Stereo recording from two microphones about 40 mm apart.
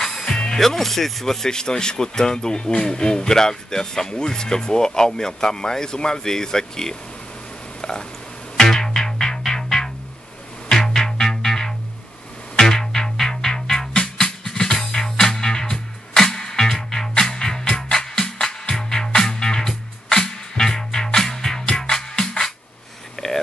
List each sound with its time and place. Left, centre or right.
0.2 s music: centre
0.6 s speech: centre
7.8 s a sound: centre
8.5 s music: centre
10.9 s music: centre
21.6 s music: left
23.1 s a sound: centre